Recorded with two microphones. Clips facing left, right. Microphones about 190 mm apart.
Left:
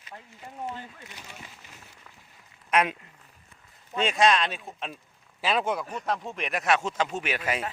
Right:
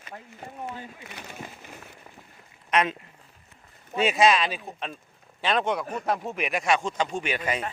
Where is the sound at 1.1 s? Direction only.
55° right (ahead or behind).